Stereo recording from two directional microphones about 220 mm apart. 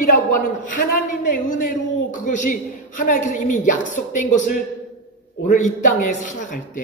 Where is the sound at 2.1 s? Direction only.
35° left (ahead or behind).